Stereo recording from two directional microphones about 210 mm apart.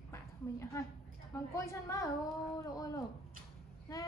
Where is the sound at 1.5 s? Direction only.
15° left (ahead or behind).